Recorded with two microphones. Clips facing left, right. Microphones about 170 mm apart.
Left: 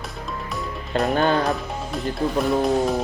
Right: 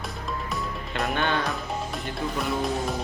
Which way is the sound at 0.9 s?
40° left (ahead or behind).